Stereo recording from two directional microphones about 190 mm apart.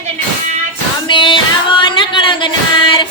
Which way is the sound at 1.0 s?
25° left (ahead or behind).